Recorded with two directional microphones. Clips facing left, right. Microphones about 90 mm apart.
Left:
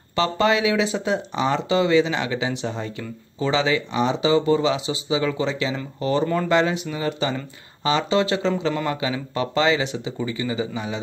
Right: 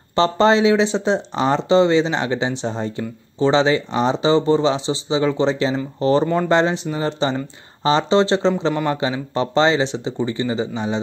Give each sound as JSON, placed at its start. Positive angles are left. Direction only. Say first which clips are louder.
{"t": 0.1, "sound": "speech", "louder": "right 5 dB", "side_deg": -30}